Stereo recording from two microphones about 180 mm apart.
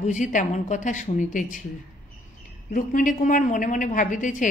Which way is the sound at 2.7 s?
50° left (ahead or behind).